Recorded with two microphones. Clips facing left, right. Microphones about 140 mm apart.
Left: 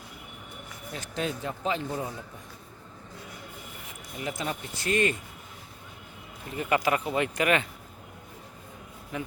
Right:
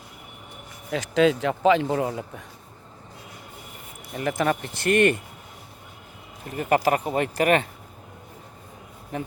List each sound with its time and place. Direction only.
0.9 s speech: 90° right; by 2.4 s 70° right (ahead or behind)
4.2 s speech: 60° right (ahead or behind)
6.5 s speech: 40° right (ahead or behind)